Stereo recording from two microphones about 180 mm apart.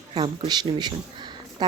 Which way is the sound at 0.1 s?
25° right (ahead or behind).